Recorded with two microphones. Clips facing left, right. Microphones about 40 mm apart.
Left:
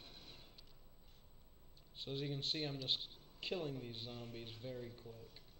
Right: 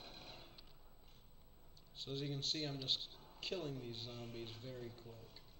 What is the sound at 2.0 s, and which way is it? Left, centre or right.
A man's voice, centre.